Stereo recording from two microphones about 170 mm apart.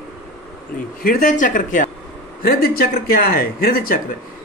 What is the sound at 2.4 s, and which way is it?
A man's voice, 65° left (ahead or behind).